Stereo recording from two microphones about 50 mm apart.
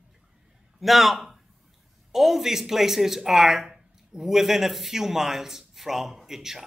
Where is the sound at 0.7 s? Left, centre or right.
Centre.